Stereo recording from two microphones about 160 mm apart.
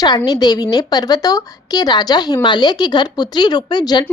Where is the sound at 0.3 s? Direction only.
25° left (ahead or behind).